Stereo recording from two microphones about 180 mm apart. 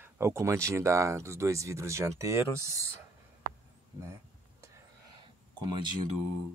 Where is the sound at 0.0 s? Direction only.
15° right (ahead or behind).